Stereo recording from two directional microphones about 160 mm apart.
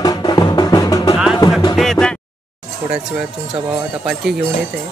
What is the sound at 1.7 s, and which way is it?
Music, centre (ahead or behind).